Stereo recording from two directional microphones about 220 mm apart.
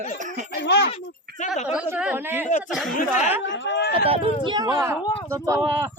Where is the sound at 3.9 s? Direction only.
25° right (ahead or behind).